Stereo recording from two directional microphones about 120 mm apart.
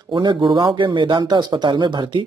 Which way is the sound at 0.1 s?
40° right (ahead or behind).